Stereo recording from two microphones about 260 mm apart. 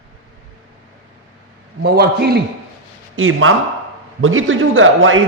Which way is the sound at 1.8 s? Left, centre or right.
Right.